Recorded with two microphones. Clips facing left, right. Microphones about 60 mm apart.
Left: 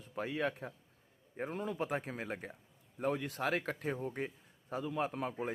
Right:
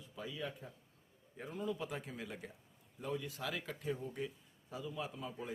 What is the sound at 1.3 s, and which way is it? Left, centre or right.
Speech, left.